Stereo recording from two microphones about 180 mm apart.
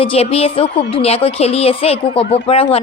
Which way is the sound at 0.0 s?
30° left (ahead or behind).